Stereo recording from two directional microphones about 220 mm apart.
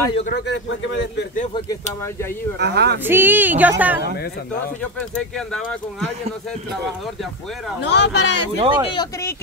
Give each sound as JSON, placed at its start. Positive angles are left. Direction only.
{"t": 0.3, "sound": "speech", "side_deg": 55}
{"t": 2.6, "sound": "speech", "side_deg": -50}
{"t": 3.1, "sound": "speech", "side_deg": -10}
{"t": 5.1, "sound": "speech", "side_deg": 5}
{"t": 7.9, "sound": "speech", "side_deg": 50}
{"t": 8.5, "sound": "speech", "side_deg": -25}
{"t": 8.8, "sound": "speech", "side_deg": 20}